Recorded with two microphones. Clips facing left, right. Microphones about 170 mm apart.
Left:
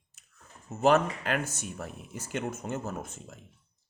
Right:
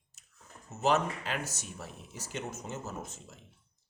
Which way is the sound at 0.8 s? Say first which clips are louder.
Left 5 dB; 55° left (ahead or behind).